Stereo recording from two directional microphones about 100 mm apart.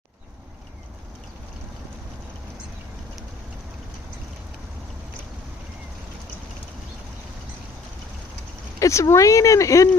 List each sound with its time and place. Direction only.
8.8 s speech: 30° left (ahead or behind)